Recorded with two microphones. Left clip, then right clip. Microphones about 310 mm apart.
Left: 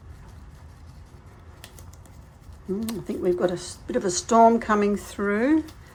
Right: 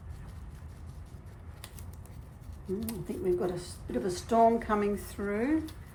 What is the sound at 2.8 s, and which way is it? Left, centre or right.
Speech, left.